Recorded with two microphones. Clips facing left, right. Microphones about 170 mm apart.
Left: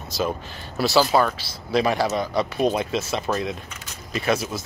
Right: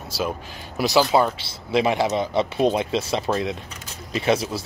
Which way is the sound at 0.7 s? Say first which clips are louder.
Right 1 dB; 15° right (ahead or behind).